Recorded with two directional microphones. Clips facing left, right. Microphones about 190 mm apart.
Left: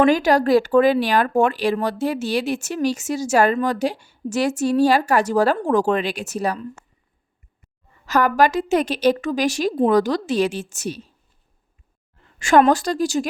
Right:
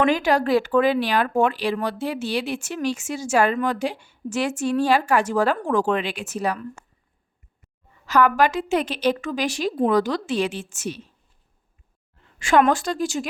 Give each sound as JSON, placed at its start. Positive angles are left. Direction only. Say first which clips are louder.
{"t": 0.0, "sound": "speech", "louder": "left 4 dB", "side_deg": 40}
{"t": 8.0, "sound": "speech", "louder": "left 1 dB", "side_deg": 45}
{"t": 12.4, "sound": "speech", "louder": "left 3 dB", "side_deg": 45}